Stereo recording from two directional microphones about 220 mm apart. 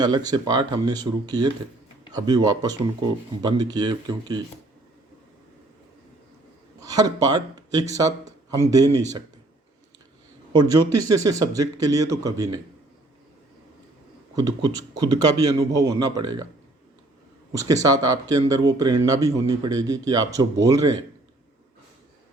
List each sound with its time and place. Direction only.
0.3 s speech: 20° right (ahead or behind)
6.7 s a man's voice: 15° right (ahead or behind)
10.5 s speech: 15° right (ahead or behind)
14.3 s speech: 15° right (ahead or behind)
17.5 s speech: 15° right (ahead or behind)